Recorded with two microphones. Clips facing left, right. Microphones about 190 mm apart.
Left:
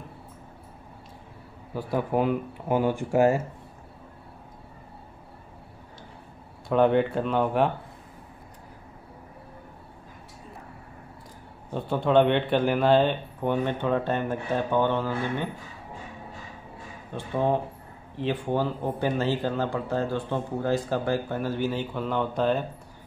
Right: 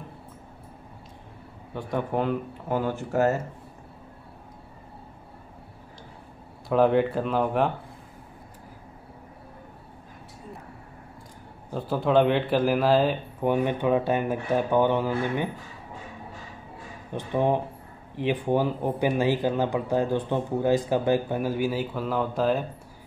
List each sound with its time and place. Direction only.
1.7 s speech: 5° left (ahead or behind)
6.7 s speech: centre (ahead or behind)
11.7 s speech: centre (ahead or behind)
17.1 s speech: 15° right (ahead or behind)